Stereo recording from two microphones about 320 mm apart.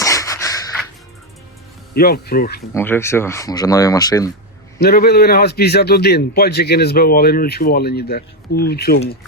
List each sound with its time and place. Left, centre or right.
0.0 s a sound: centre
1.9 s a man's voice: left
2.7 s speech: centre
4.8 s a man's voice: left